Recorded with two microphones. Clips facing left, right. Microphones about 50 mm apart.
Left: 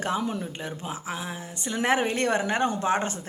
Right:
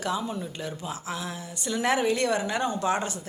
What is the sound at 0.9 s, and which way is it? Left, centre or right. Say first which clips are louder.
Speech: left 1 dB; left.